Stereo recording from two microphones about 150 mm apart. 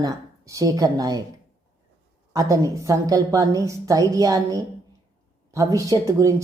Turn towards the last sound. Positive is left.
turn(degrees=-20)  # may be behind; listen again after turning